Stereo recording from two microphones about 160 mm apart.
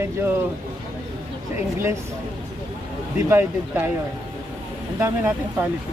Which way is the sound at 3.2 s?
15° right (ahead or behind).